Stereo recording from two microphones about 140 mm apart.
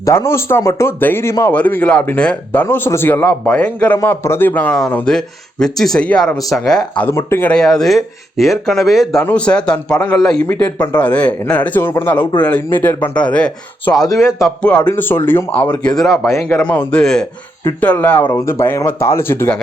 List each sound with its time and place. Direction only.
0.0 s a man's voice: 20° left (ahead or behind)
7.1 s a man's voice: 15° left (ahead or behind)
7.5 s a man's voice: 5° left (ahead or behind)
10.4 s a man's voice: 15° left (ahead or behind)
14.2 s speech: 20° left (ahead or behind)
14.4 s a man's voice: 5° left (ahead or behind)
16.0 s speech: centre (ahead or behind)
16.3 s a man's voice: 20° left (ahead or behind)